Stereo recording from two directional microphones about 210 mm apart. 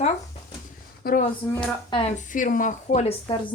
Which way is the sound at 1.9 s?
30° left (ahead or behind).